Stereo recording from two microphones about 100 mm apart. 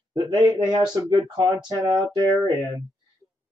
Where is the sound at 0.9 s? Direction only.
50° right (ahead or behind).